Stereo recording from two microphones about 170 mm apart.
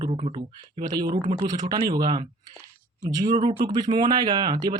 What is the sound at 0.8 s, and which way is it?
Speech, 25° right (ahead or behind).